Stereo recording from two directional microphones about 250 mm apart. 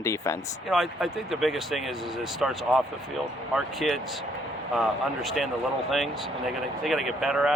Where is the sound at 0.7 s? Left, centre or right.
Centre.